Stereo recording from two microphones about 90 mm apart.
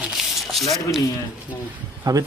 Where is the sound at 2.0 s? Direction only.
45° right (ahead or behind).